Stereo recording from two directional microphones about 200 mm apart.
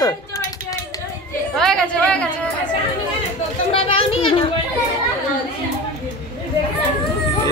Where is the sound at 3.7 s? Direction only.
25° left (ahead or behind).